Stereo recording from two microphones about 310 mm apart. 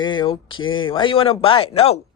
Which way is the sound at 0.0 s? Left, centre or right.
Centre.